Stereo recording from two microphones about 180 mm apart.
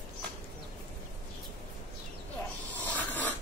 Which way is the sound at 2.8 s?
10° left (ahead or behind).